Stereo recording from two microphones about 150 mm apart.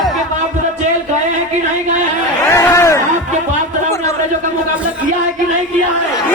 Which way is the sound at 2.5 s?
20° left (ahead or behind).